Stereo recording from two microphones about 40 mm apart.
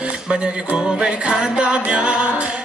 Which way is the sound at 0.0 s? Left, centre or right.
Right.